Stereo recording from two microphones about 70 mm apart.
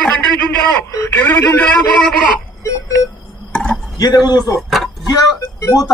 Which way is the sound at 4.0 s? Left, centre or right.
Left.